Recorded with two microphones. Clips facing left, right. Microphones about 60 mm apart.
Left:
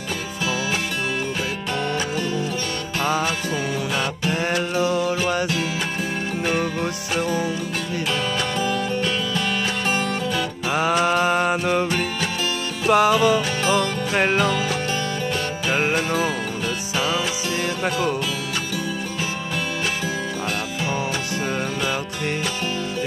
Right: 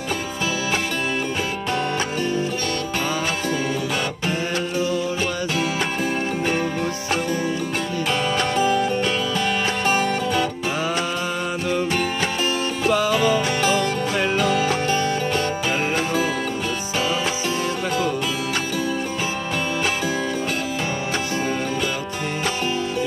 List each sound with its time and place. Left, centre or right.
4.7 s music: left
9.8 s music: centre
10.7 s mantra: left
12.8 s music: left
13.7 s music: left